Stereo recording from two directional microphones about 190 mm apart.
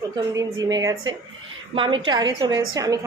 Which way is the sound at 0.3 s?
20° right (ahead or behind).